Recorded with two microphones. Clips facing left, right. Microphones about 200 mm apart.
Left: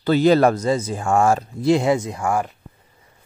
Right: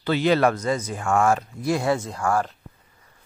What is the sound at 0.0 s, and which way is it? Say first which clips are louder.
Speech: left 5 dB; 40° left (ahead or behind).